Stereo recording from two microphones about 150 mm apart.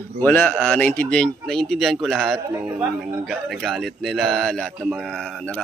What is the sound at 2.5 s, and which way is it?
Speech, 20° right (ahead or behind).